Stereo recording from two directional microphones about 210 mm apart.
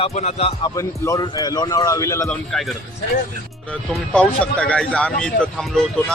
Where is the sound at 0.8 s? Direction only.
15° left (ahead or behind).